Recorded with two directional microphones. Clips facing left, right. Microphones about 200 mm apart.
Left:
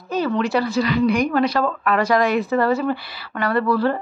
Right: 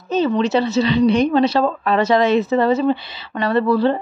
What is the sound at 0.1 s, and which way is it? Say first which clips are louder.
A woman's voice: right 3 dB; 20° right (ahead or behind).